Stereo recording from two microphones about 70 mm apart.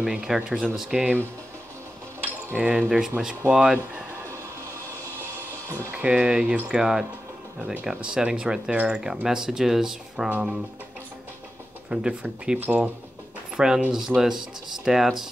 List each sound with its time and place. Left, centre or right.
0.0 s speech: centre
2.5 s speech: centre
5.9 s speech: centre
11.9 s speech: centre
12.5 s speech: right
13.6 s speech: centre